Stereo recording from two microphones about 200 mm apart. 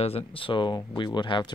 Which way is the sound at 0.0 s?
30° left (ahead or behind).